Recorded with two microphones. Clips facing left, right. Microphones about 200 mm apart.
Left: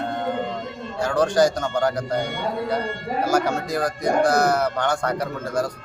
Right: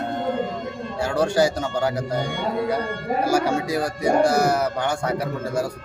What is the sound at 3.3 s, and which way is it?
Speech, 10° right (ahead or behind).